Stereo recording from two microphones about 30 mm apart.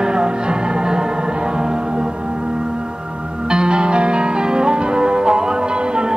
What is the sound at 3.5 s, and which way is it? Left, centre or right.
Music, right.